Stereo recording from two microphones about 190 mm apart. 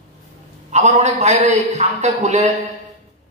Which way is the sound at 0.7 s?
35° right (ahead or behind).